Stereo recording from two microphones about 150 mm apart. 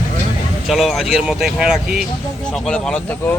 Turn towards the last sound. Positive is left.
turn(degrees=10)  # may be behind; listen again after turning